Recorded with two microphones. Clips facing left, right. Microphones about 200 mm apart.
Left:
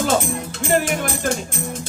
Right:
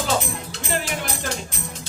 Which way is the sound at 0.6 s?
50° left (ahead or behind).